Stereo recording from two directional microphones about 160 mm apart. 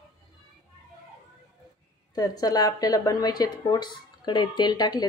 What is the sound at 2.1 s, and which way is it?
A woman's voice, 25° left (ahead or behind).